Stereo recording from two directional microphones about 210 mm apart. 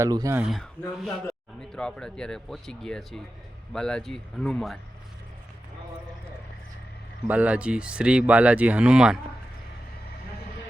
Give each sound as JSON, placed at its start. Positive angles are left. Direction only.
{"t": 0.0, "sound": "speech", "side_deg": -15}
{"t": 0.3, "sound": "speech", "side_deg": 0}
{"t": 7.3, "sound": "speech", "side_deg": -5}